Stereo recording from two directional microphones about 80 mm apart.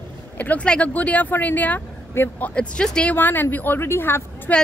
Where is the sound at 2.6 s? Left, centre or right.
Centre.